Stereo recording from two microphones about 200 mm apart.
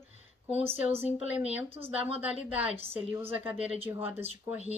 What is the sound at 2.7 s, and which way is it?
Speech, 30° right (ahead or behind).